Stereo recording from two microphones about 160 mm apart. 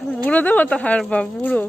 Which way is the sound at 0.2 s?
10° left (ahead or behind).